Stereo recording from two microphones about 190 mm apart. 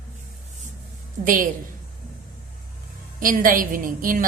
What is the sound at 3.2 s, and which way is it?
A woman's voice, 45° right (ahead or behind).